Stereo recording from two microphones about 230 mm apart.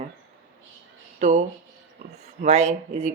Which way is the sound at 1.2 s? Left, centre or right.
Right.